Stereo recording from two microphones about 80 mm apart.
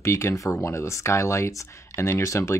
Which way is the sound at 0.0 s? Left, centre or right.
Left.